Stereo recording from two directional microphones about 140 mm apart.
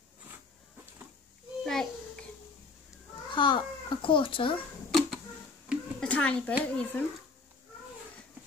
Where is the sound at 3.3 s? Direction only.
35° left (ahead or behind).